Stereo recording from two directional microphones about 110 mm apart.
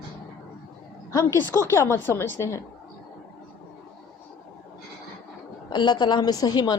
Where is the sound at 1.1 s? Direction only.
25° left (ahead or behind).